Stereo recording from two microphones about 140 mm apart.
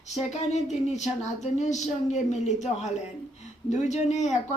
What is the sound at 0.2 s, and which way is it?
Speech, 50° left (ahead or behind).